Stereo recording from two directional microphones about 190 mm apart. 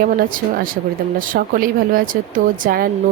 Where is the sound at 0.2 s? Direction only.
45° right (ahead or behind).